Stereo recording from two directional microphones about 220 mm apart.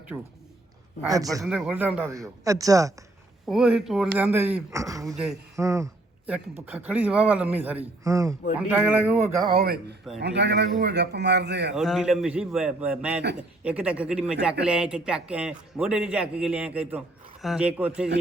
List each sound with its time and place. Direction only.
0.1 s speech: 10° right (ahead or behind)
1.5 s speech: 5° right (ahead or behind)
3.4 s speech: 5° right (ahead or behind)
5.1 s a man's voice: centre (ahead or behind)
5.5 s a sound: 15° right (ahead or behind)
6.7 s speech: 5° right (ahead or behind)
9.6 s speech: 45° right (ahead or behind)
11.7 s a man's voice: centre (ahead or behind)